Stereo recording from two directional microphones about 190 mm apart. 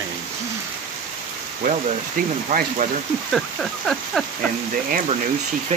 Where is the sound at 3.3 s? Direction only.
Centre (ahead or behind).